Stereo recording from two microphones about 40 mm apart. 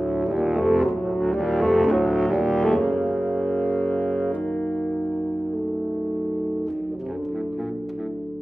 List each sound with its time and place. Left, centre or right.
0.1 s music: centre
1.3 s cello: centre
2.5 s music: centre
3.0 s music: right
3.3 s music: left